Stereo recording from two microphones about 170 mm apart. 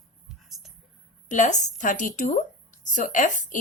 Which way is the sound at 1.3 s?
45° left (ahead or behind).